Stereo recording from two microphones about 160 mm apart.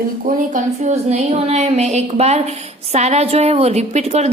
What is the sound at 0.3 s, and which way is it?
Speech, 50° right (ahead or behind).